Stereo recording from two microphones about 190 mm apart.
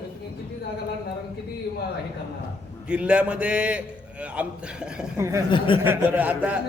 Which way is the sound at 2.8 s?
5° right (ahead or behind).